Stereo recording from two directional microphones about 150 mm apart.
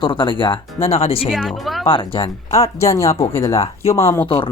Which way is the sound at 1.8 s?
35° left (ahead or behind).